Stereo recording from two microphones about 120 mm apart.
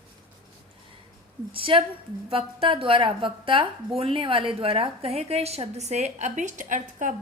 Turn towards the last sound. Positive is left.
turn(degrees=-90)